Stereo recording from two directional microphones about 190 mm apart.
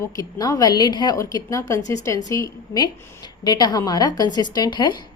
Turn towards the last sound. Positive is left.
turn(degrees=25)  # may be behind; listen again after turning